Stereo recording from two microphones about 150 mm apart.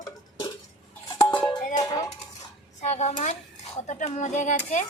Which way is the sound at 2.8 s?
50° left (ahead or behind).